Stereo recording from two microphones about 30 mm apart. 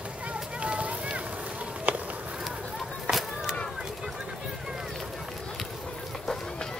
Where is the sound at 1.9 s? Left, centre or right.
Right.